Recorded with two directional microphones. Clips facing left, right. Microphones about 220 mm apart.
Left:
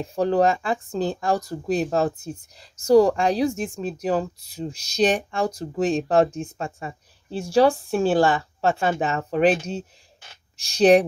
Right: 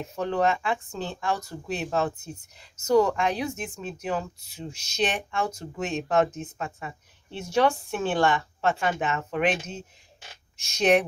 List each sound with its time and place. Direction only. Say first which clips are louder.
0.0 s speech: left 6 dB; 35° left (ahead or behind)